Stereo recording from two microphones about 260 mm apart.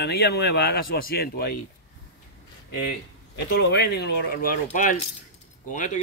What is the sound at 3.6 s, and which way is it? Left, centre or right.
A man's voice, left.